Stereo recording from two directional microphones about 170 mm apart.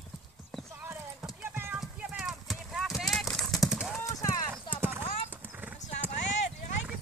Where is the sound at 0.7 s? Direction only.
15° right (ahead or behind).